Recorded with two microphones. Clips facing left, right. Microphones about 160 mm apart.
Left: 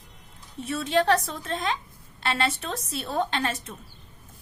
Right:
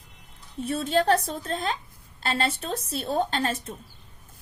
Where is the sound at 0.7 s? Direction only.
40° right (ahead or behind).